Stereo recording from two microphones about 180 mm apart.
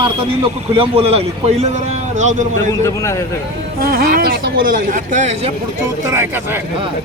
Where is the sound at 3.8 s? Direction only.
55° right (ahead or behind).